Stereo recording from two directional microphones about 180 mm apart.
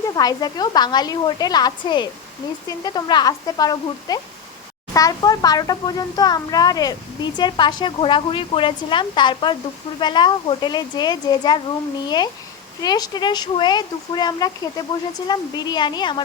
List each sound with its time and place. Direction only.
0.2 s speech: 20° left (ahead or behind)